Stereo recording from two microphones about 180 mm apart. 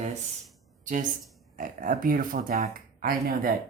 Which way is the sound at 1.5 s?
50° right (ahead or behind).